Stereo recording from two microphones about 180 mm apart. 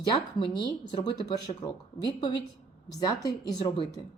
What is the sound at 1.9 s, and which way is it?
Speech, 20° left (ahead or behind).